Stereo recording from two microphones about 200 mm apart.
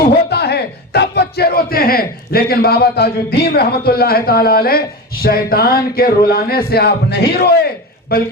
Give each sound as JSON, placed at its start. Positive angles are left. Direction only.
{"t": 0.3, "sound": "speech", "side_deg": 55}